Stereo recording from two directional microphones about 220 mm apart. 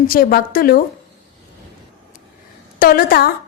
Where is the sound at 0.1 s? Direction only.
40° left (ahead or behind).